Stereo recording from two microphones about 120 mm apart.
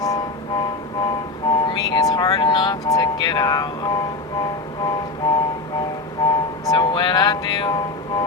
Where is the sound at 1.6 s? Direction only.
35° left (ahead or behind).